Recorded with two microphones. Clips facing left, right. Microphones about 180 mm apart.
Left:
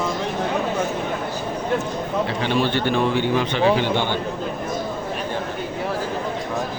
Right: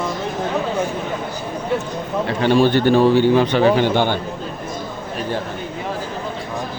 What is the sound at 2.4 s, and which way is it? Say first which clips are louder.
Speech: right 10 dB; 45° right (ahead or behind).